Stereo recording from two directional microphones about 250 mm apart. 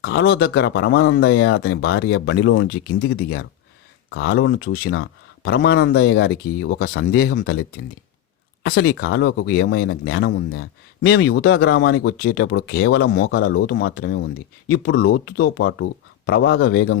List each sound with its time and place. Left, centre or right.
0.0 s a man's voice: left
8.6 s a man's voice: left